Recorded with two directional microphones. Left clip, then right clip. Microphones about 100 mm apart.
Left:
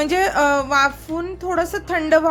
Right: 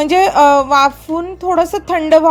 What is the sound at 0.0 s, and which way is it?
A woman's voice, 45° right (ahead or behind).